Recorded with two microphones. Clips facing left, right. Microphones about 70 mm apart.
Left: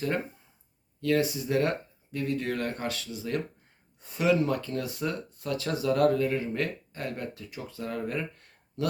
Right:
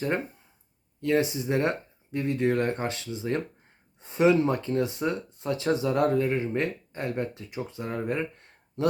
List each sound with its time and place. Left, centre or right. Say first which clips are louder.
1.0 s speech: right 1 dB; right